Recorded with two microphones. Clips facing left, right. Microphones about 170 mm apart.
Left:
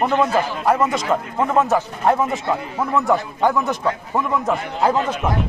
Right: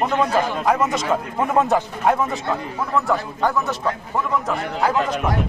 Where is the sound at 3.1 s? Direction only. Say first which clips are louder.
Left 3 dB; 15° left (ahead or behind).